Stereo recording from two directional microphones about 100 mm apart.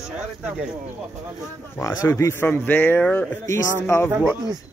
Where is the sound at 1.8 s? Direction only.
30° left (ahead or behind); by 3.2 s 15° left (ahead or behind).